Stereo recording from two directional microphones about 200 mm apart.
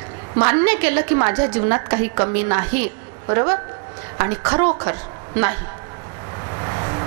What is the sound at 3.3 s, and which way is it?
Speech, 20° right (ahead or behind).